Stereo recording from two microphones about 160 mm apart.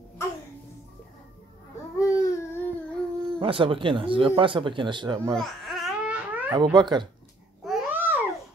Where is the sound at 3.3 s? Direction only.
35° right (ahead or behind).